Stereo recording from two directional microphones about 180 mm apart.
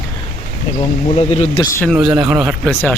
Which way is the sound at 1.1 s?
35° left (ahead or behind).